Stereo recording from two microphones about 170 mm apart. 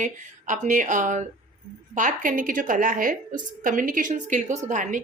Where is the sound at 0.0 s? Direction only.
45° right (ahead or behind).